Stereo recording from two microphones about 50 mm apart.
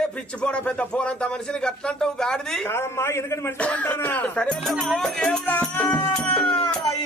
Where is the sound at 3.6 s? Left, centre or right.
Left.